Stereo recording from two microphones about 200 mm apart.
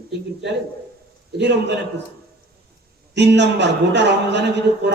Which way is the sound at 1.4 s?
60° right (ahead or behind).